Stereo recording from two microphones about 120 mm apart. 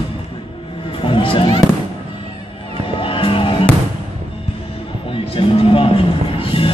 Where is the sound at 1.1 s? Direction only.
50° left (ahead or behind).